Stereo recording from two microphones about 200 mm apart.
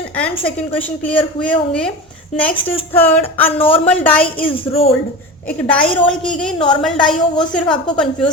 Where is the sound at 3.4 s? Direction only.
25° left (ahead or behind).